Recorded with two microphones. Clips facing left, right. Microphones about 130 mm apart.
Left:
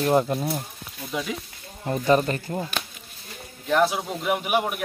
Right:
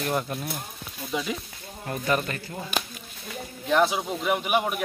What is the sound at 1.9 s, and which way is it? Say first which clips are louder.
Speech: left 6 dB; 30° left (ahead or behind).